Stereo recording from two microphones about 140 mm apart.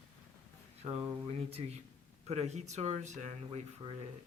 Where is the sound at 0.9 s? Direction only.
15° right (ahead or behind).